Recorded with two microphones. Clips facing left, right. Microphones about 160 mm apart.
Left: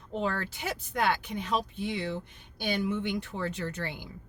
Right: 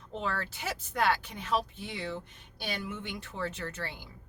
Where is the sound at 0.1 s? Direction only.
10° left (ahead or behind).